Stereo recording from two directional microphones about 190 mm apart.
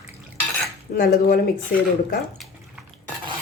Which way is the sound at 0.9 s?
50° left (ahead or behind).